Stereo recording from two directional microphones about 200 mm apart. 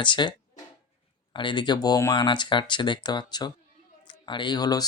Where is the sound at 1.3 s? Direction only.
25° left (ahead or behind).